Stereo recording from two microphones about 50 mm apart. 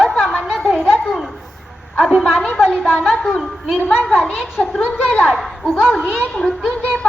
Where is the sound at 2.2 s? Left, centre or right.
Centre.